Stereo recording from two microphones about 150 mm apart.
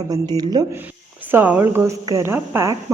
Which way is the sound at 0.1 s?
25° right (ahead or behind).